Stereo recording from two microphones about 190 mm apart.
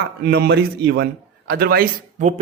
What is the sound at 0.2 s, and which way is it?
A man's voice, 55° right (ahead or behind).